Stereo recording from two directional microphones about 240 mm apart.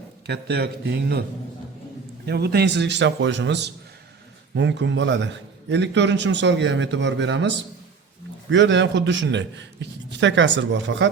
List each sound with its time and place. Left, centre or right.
0.3 s a man's voice: right
2.2 s a man's voice: right